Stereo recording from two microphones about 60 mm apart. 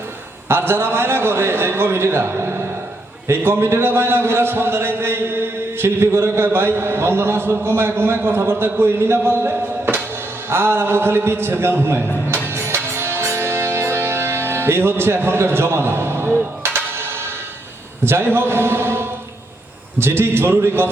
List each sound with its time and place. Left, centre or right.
0.4 s a man's voice: right
12.3 s music: right
18.0 s a man's voice: right